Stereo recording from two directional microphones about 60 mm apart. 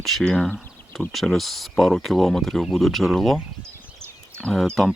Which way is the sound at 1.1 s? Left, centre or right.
Centre.